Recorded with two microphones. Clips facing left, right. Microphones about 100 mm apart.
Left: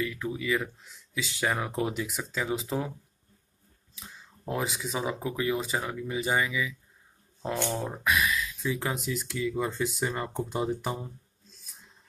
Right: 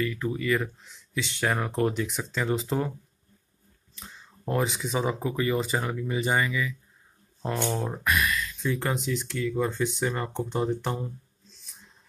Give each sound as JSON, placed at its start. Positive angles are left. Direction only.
{"t": 0.0, "sound": "speech", "side_deg": 0}
{"t": 3.9, "sound": "speech", "side_deg": 0}
{"t": 7.7, "sound": "speech", "side_deg": 0}